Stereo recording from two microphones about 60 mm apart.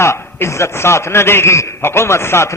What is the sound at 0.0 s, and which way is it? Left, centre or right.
A man's voice, left.